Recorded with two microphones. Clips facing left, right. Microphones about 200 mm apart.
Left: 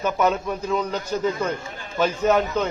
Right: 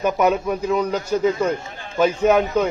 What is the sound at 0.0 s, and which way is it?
A man's voice, 10° right (ahead or behind).